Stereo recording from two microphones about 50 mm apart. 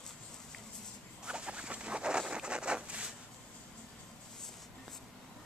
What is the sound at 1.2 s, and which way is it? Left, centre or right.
Patter, right.